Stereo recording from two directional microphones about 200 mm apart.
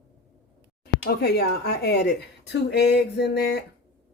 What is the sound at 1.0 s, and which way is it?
A woman's voice, 50° left (ahead or behind).